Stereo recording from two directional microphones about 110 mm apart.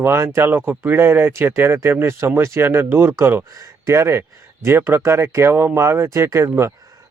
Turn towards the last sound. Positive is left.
turn(degrees=-25)  # may be behind; listen again after turning